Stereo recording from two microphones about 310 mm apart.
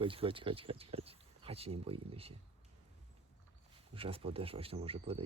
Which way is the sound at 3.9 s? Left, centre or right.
Centre.